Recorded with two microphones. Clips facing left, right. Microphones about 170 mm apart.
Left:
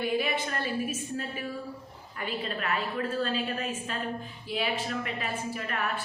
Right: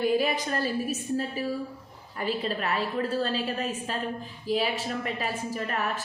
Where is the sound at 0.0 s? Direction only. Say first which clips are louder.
Right 4 dB; 40° right (ahead or behind).